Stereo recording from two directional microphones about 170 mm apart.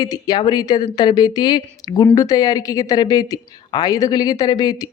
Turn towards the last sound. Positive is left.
turn(degrees=25)  # may be behind; listen again after turning